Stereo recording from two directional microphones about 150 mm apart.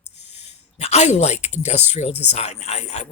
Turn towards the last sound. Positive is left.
turn(degrees=45)  # may be behind; listen again after turning